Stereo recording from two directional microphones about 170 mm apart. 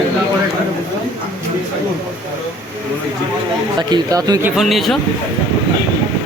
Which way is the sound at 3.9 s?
20° right (ahead or behind).